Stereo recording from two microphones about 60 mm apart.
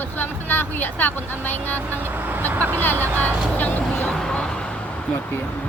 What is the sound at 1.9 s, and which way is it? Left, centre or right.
Speech, right.